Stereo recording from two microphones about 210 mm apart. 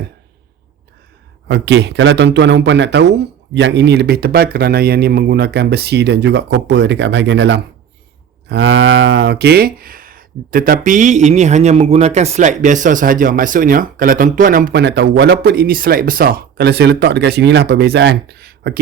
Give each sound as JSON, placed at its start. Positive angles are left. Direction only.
{"t": 1.5, "sound": "a man's voice", "side_deg": -55}